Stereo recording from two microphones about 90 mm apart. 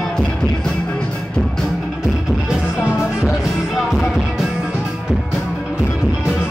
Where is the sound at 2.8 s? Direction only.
25° left (ahead or behind).